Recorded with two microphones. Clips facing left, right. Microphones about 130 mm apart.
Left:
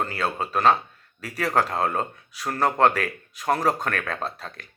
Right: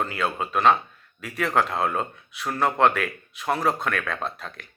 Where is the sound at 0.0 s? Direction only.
35° left (ahead or behind).